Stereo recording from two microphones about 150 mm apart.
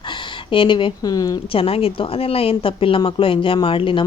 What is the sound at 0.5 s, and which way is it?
Speech, 35° left (ahead or behind).